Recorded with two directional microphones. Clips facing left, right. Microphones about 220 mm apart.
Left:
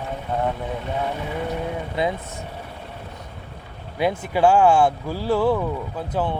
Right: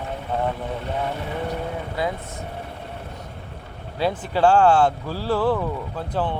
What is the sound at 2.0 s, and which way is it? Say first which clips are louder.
Speech: left 2 dB; 20° left (ahead or behind).